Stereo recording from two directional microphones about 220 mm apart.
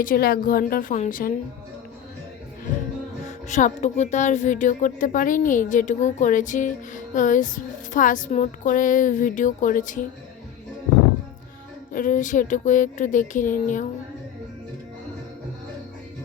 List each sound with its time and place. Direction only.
0.0 s speech: 40° left (ahead or behind)
3.2 s speech: 30° left (ahead or behind)
11.9 s speech: 35° left (ahead or behind)